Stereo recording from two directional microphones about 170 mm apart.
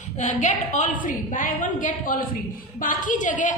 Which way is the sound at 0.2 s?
45° left (ahead or behind).